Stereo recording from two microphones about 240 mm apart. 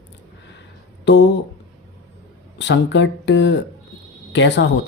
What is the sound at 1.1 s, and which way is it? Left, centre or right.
Speech, left.